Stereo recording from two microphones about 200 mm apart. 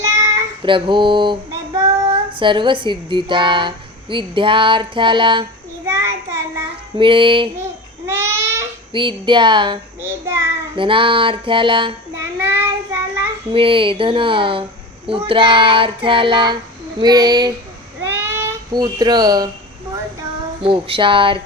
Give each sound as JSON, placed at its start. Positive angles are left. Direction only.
{"t": 0.0, "sound": "child singing", "side_deg": -20}
{"t": 2.3, "sound": "a woman's voice", "side_deg": -25}
{"t": 5.9, "sound": "child singing", "side_deg": -15}
{"t": 6.9, "sound": "a woman's voice", "side_deg": -25}
{"t": 8.0, "sound": "babbling", "side_deg": -15}
{"t": 8.9, "sound": "a woman's voice", "side_deg": -25}
{"t": 10.0, "sound": "child singing", "side_deg": -10}
{"t": 10.8, "sound": "a woman's voice", "side_deg": -25}
{"t": 12.4, "sound": "child singing", "side_deg": -10}
{"t": 13.5, "sound": "a woman's voice", "side_deg": -25}
{"t": 18.0, "sound": "a sound", "side_deg": -10}
{"t": 20.6, "sound": "a woman's voice", "side_deg": -25}